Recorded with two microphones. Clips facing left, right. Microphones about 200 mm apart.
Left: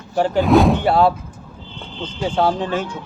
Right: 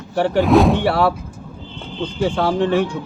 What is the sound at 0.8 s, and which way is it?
Speech, 70° right (ahead or behind).